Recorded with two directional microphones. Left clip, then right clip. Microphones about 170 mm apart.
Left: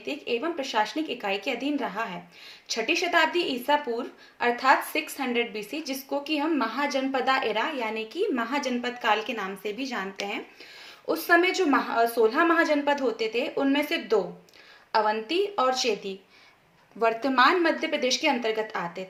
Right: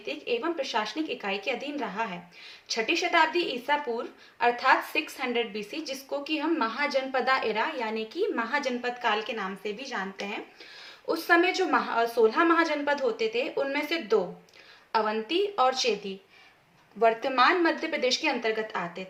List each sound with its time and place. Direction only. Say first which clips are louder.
0.0 s speech: left 1 dB; 40° left (ahead or behind)
11.0 s speech: left 1 dB; 30° left (ahead or behind)
17.0 s speech: left 1 dB; 35° left (ahead or behind)